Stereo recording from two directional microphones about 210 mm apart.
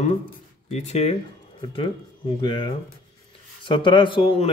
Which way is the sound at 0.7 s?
30° left (ahead or behind).